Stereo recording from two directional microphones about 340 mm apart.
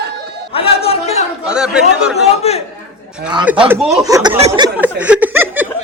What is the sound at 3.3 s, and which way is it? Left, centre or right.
Speech, centre.